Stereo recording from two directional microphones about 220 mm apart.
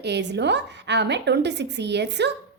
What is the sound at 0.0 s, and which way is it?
A woman's voice, 50° right (ahead or behind).